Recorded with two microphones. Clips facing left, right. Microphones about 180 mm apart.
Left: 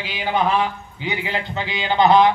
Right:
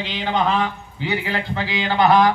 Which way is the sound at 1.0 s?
20° left (ahead or behind).